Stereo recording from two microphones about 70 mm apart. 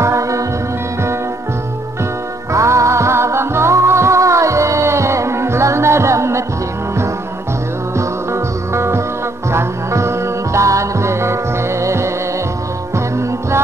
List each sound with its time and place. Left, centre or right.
0.0 s music: right
2.5 s music: right
8.0 s music: right